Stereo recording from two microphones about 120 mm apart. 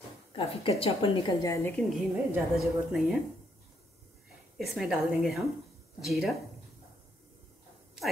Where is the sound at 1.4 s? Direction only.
25° left (ahead or behind).